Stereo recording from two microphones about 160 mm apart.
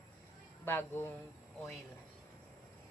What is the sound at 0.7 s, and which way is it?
Speech, 15° left (ahead or behind).